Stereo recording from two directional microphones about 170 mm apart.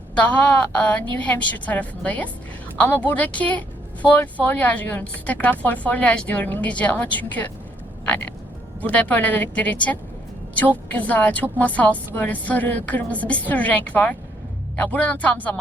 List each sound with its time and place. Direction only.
0.2 s speech: 10° left (ahead or behind)
8.0 s frog: 10° left (ahead or behind)
8.8 s speech: 10° left (ahead or behind)